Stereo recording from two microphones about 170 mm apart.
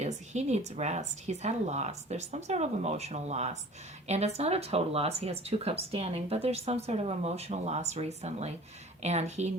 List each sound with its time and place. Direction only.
0.0 s speech: 45° right (ahead or behind)